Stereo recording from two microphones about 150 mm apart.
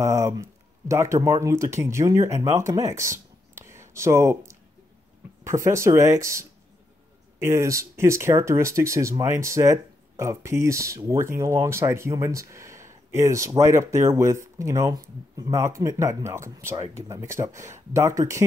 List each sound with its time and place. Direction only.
0.0 s speech: 20° right (ahead or behind)